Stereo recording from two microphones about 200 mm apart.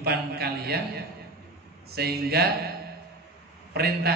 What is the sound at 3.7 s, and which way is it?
Speech, 50° right (ahead or behind).